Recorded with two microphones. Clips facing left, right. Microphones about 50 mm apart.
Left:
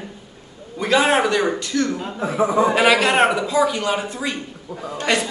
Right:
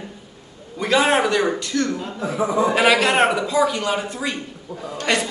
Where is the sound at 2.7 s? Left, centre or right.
Centre.